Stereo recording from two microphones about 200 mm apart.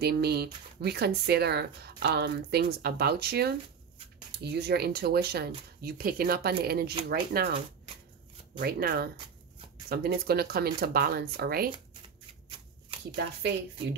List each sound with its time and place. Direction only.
0.0 s speech: 50° right (ahead or behind)
8.5 s speech: 50° right (ahead or behind)